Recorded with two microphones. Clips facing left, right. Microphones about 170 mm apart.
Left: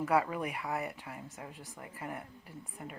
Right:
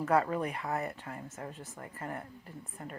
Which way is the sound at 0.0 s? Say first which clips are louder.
Right 2 dB; 10° left (ahead or behind).